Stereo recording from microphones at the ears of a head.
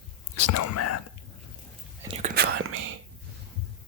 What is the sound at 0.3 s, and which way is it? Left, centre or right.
Speech, left.